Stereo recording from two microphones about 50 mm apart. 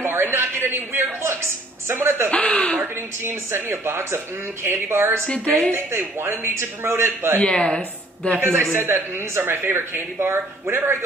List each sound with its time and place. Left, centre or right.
0.0 s a man's voice: right
2.3 s speech: left
3.3 s speech: right
5.2 s speech: left
5.7 s speech: right
7.3 s speech: centre
8.4 s speech: right